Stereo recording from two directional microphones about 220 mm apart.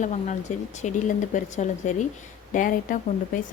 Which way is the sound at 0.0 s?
35° left (ahead or behind).